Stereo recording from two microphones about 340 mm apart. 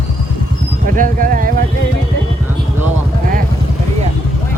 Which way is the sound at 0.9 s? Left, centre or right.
Right.